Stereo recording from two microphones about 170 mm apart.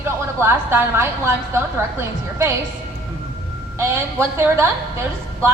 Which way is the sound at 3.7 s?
15° right (ahead or behind).